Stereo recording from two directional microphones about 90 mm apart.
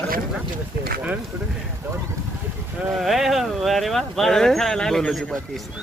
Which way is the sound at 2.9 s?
Centre (ahead or behind).